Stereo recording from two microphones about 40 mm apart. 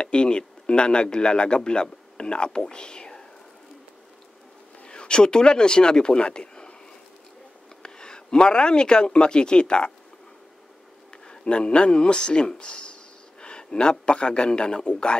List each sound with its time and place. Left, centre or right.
0.0 s a man's voice: left
4.7 s speech: left
7.8 s speech: centre
11.2 s speech: left